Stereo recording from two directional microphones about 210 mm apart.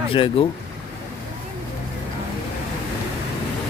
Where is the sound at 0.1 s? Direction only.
25° left (ahead or behind).